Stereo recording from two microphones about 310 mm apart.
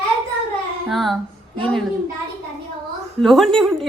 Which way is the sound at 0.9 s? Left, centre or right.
Centre.